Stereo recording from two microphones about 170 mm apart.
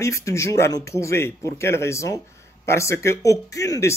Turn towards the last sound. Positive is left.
turn(degrees=15)  # may be behind; listen again after turning